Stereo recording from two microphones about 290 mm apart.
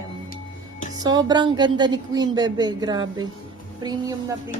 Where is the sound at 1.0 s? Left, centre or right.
Centre.